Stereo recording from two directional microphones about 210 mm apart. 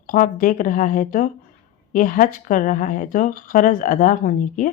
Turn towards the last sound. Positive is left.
turn(degrees=40)  # may be behind; listen again after turning